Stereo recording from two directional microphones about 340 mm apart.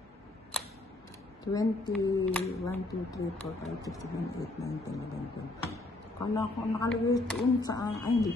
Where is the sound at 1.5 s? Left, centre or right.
Centre.